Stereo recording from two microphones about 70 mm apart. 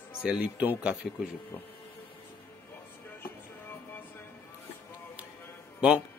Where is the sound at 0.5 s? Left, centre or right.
Right.